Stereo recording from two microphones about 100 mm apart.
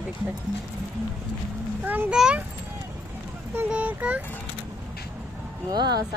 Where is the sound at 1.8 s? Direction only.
20° right (ahead or behind).